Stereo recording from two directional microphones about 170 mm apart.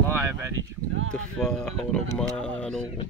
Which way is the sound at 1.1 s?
5° left (ahead or behind).